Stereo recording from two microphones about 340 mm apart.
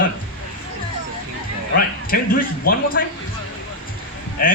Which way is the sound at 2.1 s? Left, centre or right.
Left.